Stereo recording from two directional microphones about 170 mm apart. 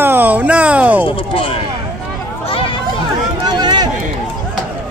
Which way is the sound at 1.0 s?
30° left (ahead or behind).